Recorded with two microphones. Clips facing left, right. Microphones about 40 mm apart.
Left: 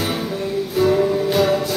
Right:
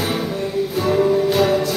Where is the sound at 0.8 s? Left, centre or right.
Centre.